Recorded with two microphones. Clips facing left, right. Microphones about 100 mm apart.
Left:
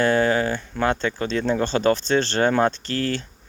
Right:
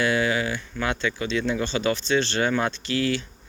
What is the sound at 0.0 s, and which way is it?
Speech, 40° left (ahead or behind).